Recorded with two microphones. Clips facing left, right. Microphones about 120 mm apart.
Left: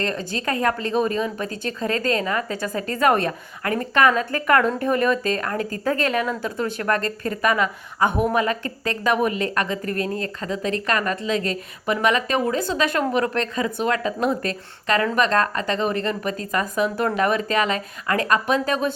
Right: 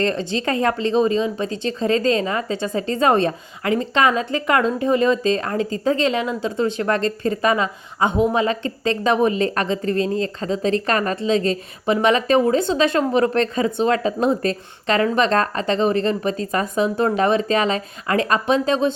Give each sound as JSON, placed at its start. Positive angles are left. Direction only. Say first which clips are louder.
{"t": 0.0, "sound": "a woman's voice", "louder": "right 4 dB", "side_deg": -30}